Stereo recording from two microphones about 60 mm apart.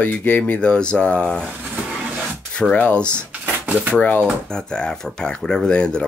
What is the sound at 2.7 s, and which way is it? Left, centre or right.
Speech, centre.